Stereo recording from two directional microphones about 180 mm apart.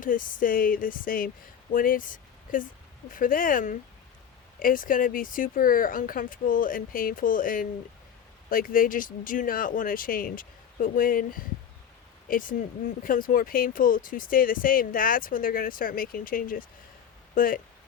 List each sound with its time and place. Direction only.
0.0 s speech: 50° left (ahead or behind)